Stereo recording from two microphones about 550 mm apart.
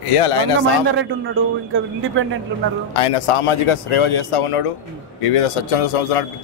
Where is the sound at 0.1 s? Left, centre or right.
Left.